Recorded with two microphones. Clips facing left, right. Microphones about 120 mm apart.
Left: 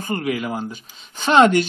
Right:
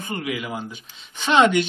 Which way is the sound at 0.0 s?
45° left (ahead or behind).